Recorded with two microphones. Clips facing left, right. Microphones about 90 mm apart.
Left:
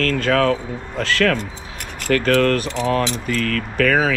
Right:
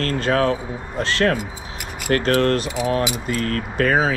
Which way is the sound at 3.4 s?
90° left.